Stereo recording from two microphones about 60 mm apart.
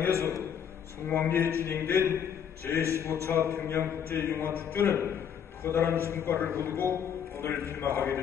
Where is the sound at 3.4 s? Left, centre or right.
Left.